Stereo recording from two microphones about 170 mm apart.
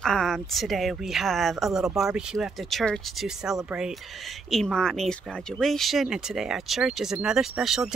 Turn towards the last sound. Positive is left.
turn(degrees=0)  # may be behind; listen again after turning